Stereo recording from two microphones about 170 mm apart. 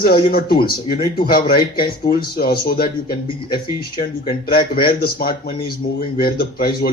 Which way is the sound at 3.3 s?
30° left (ahead or behind).